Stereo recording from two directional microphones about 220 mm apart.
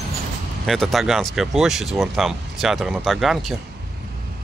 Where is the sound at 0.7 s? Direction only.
Centre (ahead or behind).